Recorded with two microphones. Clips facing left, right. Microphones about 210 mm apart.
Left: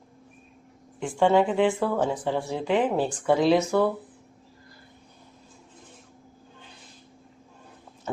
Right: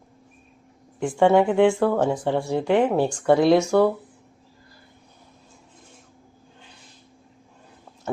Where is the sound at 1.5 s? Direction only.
70° right (ahead or behind).